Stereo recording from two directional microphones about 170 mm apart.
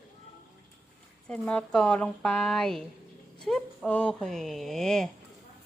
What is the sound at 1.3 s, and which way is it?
Speech, 5° left (ahead or behind).